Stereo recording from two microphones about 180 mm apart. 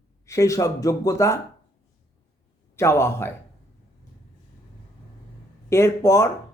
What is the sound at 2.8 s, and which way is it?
Speech, 15° left (ahead or behind).